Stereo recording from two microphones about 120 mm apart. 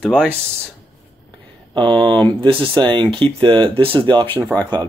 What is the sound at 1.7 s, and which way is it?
Speech, 40° right (ahead or behind).